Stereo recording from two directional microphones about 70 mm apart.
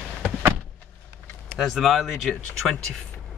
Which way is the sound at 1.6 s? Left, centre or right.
Centre.